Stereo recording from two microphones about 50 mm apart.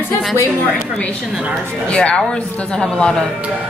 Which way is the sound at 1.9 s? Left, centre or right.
Left.